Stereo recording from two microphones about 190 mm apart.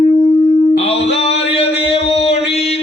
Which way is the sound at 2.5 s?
35° left (ahead or behind).